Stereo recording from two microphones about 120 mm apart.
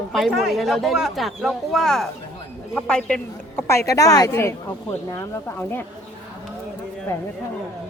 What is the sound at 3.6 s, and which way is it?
Speech, 20° left (ahead or behind).